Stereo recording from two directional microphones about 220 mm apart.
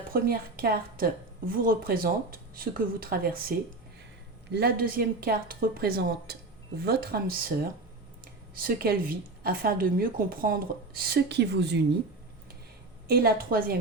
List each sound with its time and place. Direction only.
0.1 s a woman's voice: 45° right (ahead or behind)
4.5 s speech: 45° right (ahead or behind)
13.1 s speech: 45° right (ahead or behind)